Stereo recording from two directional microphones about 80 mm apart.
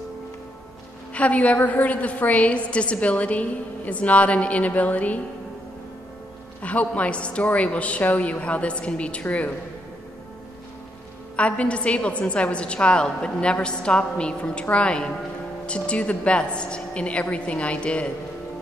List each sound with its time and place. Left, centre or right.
1.1 s a woman's voice: centre
6.6 s a woman's voice: centre
11.3 s a woman's voice: centre